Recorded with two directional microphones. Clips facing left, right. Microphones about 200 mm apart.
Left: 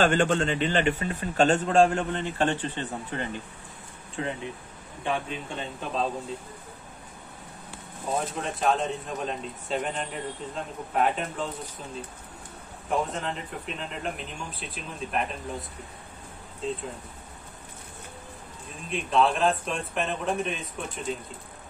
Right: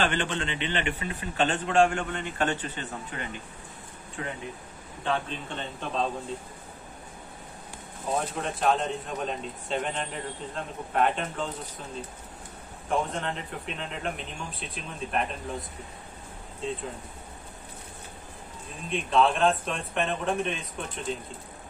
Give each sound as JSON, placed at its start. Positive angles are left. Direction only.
{"t": 0.0, "sound": "a man's voice", "side_deg": 45}
{"t": 5.0, "sound": "a man's voice", "side_deg": 10}
{"t": 8.1, "sound": "speech", "side_deg": 0}
{"t": 12.9, "sound": "speech", "side_deg": 0}
{"t": 16.6, "sound": "speech", "side_deg": 0}
{"t": 18.9, "sound": "speech", "side_deg": 0}